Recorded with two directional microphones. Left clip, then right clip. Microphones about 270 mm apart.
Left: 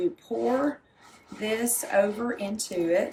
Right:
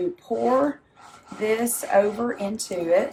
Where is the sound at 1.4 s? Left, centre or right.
Centre.